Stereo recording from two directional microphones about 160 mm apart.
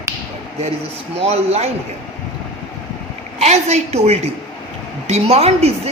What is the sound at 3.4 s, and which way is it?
A woman's voice, 45° right (ahead or behind).